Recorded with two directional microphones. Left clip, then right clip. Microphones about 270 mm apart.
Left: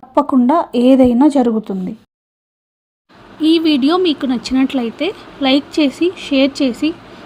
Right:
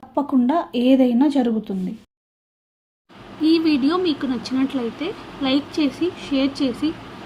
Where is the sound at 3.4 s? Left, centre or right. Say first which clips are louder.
Left 5 dB; left.